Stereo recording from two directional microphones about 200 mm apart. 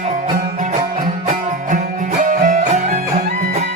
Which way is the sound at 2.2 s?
40° right (ahead or behind).